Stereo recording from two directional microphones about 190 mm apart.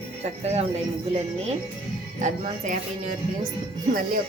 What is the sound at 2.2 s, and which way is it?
Speech, 40° right (ahead or behind).